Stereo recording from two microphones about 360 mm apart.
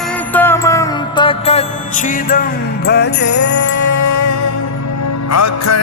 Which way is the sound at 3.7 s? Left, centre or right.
Left.